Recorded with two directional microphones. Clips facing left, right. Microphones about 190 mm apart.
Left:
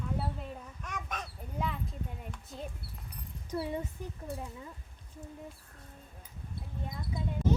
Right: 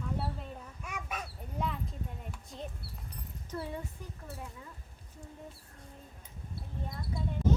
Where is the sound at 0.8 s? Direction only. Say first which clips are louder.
Even; 10° right (ahead or behind).